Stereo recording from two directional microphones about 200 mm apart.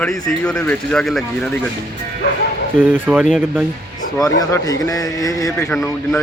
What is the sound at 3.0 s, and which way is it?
Speech, 10° right (ahead or behind).